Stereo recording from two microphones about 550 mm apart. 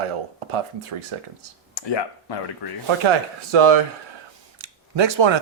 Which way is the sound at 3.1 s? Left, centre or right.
Right.